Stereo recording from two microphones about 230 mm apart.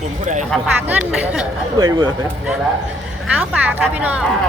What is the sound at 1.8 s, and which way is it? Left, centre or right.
Speech, centre.